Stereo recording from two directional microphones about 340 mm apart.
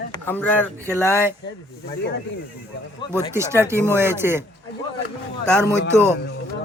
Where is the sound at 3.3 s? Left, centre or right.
Centre.